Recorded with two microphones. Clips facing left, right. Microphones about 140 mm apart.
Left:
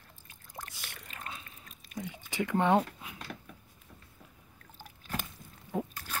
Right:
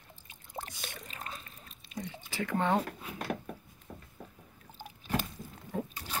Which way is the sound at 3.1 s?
55° right (ahead or behind).